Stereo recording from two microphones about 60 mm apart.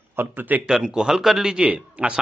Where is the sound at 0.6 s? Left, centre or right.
Centre.